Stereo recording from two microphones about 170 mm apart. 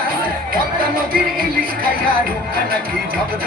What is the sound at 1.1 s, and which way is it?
Music, 60° right (ahead or behind).